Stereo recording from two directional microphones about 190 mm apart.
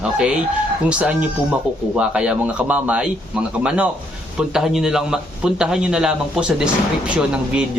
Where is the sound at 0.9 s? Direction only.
5° right (ahead or behind).